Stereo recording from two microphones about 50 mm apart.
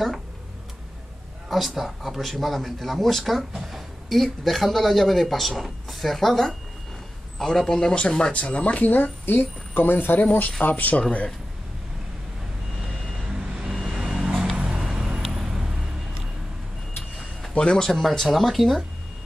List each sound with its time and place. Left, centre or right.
1.5 s a man's voice: centre
8.3 s speech: left
8.9 s a woman's voice: left
10.4 s speech: left
12.8 s vehicle: centre
17.6 s a man's voice: centre
17.8 s speech: centre